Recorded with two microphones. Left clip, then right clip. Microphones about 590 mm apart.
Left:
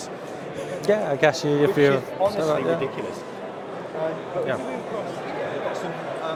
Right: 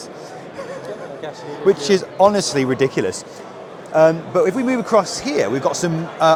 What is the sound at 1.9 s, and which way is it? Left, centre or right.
Speech, right.